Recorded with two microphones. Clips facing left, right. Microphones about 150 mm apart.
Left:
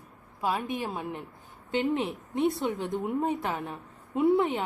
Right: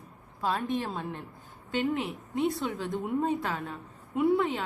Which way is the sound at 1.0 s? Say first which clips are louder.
Left 1 dB; 20° left (ahead or behind).